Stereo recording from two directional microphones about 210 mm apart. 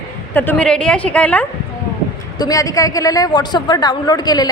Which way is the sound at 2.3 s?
15° left (ahead or behind).